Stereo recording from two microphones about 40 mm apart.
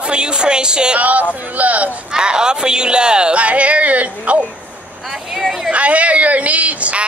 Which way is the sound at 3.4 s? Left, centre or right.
Right.